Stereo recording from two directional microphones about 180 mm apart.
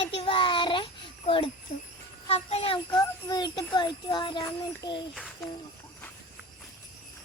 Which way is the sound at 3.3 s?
25° left (ahead or behind).